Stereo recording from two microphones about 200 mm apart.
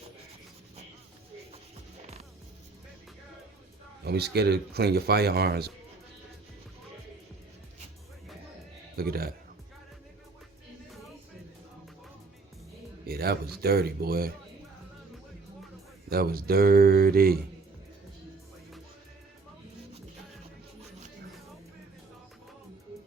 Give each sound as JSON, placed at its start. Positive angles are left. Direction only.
{"t": 4.0, "sound": "speech", "side_deg": -55}
{"t": 9.0, "sound": "speech", "side_deg": -50}
{"t": 13.1, "sound": "music", "side_deg": -50}
{"t": 13.6, "sound": "speech", "side_deg": -50}
{"t": 16.0, "sound": "speech", "side_deg": -50}